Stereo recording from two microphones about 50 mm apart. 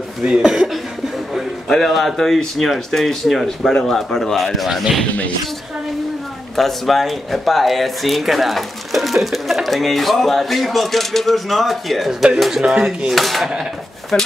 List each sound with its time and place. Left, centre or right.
0.3 s speech: centre
1.7 s speech: centre
4.6 s speech: centre
6.5 s speech: centre
12.6 s speech: centre
13.1 s speech: centre
14.1 s speech: centre